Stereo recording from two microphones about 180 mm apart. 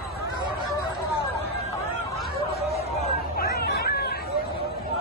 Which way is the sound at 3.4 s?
60° left (ahead or behind).